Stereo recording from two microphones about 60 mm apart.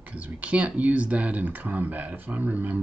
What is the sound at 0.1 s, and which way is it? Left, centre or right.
Speech, right.